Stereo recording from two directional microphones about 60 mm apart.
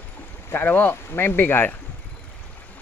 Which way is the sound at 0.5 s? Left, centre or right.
Left.